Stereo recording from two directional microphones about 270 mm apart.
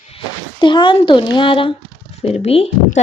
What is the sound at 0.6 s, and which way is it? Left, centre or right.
Speech, centre.